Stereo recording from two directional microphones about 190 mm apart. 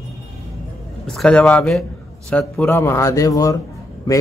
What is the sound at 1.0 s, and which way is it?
A man's voice, 5° left (ahead or behind).